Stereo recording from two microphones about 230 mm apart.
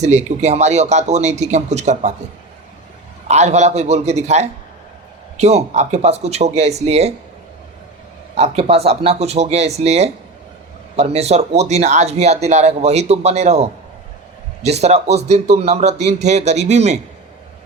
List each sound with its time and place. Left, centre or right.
0.0 s speech: right
3.2 s speech: right
8.4 s speech: right